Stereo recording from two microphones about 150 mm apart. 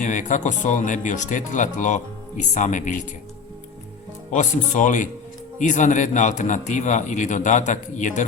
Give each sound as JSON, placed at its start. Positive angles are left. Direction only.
{"t": 0.0, "sound": "speech", "side_deg": 55}
{"t": 4.3, "sound": "speech", "side_deg": 55}